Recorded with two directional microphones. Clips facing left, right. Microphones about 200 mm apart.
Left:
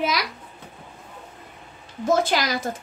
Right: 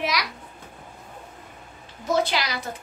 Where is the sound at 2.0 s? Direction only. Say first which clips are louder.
Left 3 dB; 50° left (ahead or behind).